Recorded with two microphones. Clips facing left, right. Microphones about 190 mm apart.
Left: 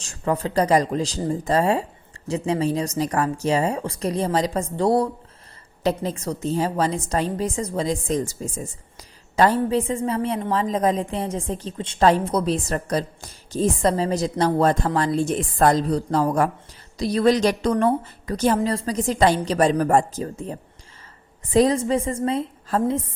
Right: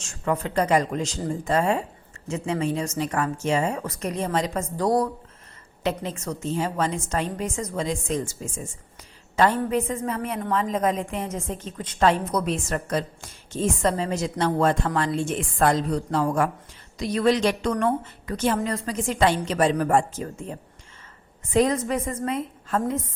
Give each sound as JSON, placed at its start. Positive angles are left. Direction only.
{"t": 0.0, "sound": "a woman's voice", "side_deg": 35}